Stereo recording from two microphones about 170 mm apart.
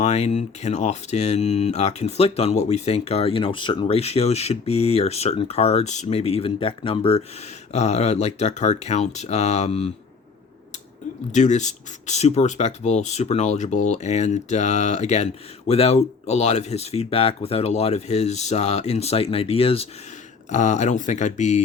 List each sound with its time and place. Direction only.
0.0 s speech: 40° left (ahead or behind)
11.3 s speech: 45° left (ahead or behind)
20.5 s speech: 45° left (ahead or behind)